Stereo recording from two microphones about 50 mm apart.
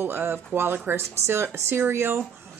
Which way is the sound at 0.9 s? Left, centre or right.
Right.